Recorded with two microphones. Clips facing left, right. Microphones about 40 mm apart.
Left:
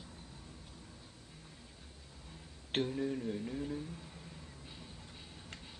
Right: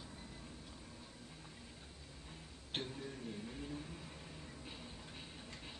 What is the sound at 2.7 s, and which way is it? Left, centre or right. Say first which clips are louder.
Speech: left 9 dB; left.